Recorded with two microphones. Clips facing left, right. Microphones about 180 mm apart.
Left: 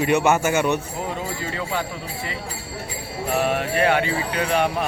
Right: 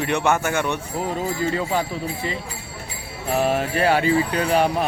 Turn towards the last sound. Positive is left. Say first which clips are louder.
# right 2 dB
turn(degrees=-35)  # may be behind; listen again after turning